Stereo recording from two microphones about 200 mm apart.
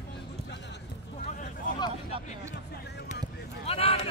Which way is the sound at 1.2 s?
35° left (ahead or behind).